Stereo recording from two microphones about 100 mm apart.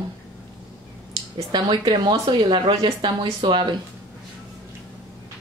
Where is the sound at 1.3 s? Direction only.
50° right (ahead or behind).